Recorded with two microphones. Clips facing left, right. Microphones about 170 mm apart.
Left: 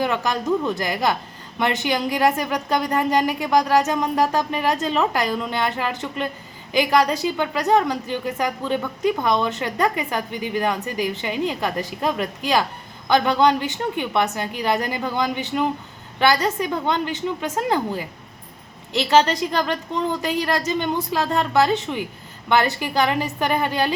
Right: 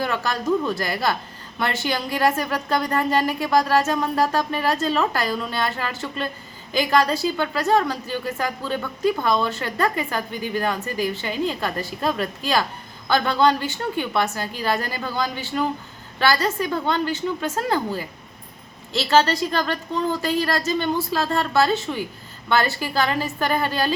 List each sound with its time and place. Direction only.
0.0 s a woman's voice: 15° left (ahead or behind)